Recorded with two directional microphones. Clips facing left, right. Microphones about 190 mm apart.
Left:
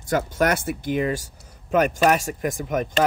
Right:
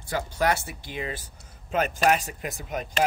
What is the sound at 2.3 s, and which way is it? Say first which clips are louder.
Speech: left 9 dB; 50° left (ahead or behind).